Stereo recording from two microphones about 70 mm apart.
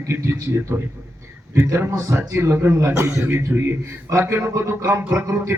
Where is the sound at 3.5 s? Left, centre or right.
Right.